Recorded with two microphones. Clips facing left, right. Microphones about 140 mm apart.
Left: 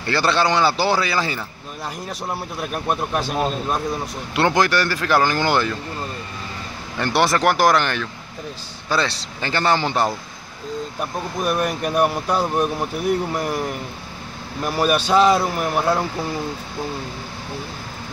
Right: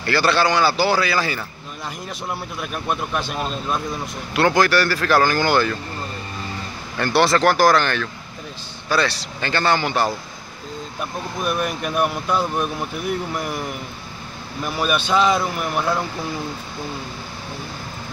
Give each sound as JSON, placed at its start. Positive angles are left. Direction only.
{"t": 0.0, "sound": "a man's voice", "side_deg": 25}
{"t": 2.2, "sound": "speech", "side_deg": 40}
{"t": 4.4, "sound": "a man's voice", "side_deg": 20}
{"t": 7.0, "sound": "a man's voice", "side_deg": 20}
{"t": 11.4, "sound": "speech", "side_deg": 40}
{"t": 14.6, "sound": "speech", "side_deg": 40}